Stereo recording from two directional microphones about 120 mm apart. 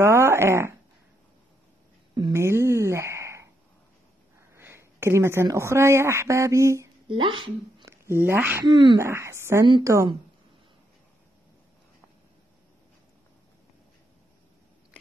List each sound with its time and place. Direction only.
0.0 s speech: 20° right (ahead or behind)
2.3 s a sound: 20° right (ahead or behind)
4.4 s speech: 20° right (ahead or behind)
7.1 s speech: 45° right (ahead or behind)
7.8 s speech: 20° right (ahead or behind)
8.6 s speech: 40° right (ahead or behind)
9.0 s speech: 20° right (ahead or behind)